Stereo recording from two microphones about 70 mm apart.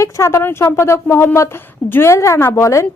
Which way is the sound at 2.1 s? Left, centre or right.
Left.